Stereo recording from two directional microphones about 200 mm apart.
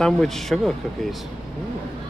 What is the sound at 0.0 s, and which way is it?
Speech, centre (ahead or behind).